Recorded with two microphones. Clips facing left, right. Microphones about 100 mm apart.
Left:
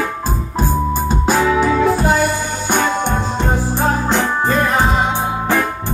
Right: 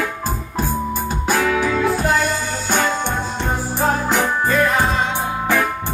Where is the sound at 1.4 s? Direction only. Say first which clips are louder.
Left 4 dB; 20° left (ahead or behind).